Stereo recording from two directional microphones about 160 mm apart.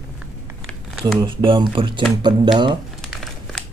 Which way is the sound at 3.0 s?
Centre (ahead or behind).